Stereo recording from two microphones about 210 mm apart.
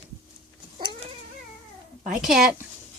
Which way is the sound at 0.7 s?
25° right (ahead or behind).